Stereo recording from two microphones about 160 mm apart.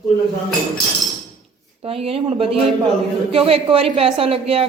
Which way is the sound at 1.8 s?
35° right (ahead or behind).